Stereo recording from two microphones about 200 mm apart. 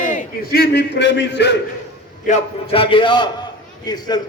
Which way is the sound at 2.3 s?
30° left (ahead or behind).